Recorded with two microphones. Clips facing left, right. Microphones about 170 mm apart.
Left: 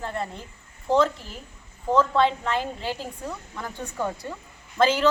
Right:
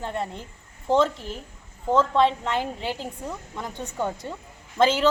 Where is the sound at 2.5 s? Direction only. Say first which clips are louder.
Right 1 dB; 20° right (ahead or behind).